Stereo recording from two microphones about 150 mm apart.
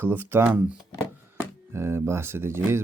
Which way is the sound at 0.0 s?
15° right (ahead or behind).